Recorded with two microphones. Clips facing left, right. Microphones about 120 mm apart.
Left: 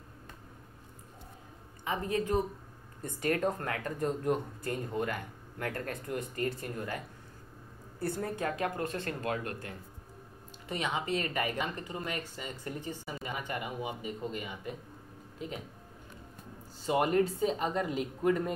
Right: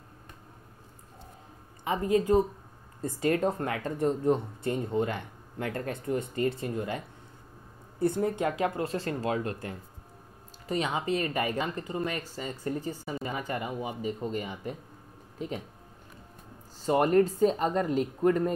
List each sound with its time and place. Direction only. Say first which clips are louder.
1.9 s speech: right 6 dB; 25° right (ahead or behind)
8.0 s speech: right 7 dB; 20° right (ahead or behind)
10.7 s speech: right 4 dB; 25° right (ahead or behind)
16.8 s speech: right 4 dB; 40° right (ahead or behind)